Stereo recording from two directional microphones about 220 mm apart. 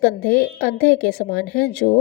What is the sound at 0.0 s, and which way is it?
A woman's voice, 40° left (ahead or behind).